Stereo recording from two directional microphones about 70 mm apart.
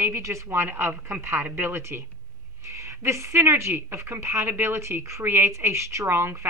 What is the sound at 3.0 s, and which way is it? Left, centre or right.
Speech, right.